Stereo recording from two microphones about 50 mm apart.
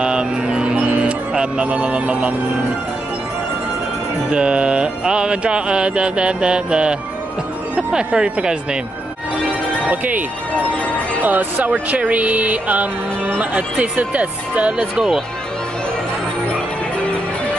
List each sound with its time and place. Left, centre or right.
0.0 s music: centre
4.3 s music: centre
8.1 s speech: centre
9.8 s speech: right